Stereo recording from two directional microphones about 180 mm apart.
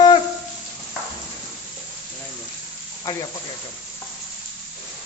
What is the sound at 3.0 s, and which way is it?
Speech, 20° left (ahead or behind).